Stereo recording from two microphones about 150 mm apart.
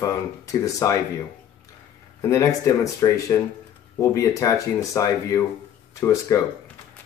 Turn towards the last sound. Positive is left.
turn(degrees=20)  # may be behind; listen again after turning